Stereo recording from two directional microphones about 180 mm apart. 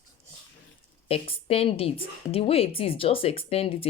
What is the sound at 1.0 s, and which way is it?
Speech, 35° left (ahead or behind).